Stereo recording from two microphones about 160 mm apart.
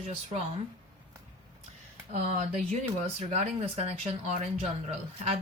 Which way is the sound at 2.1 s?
45° right (ahead or behind).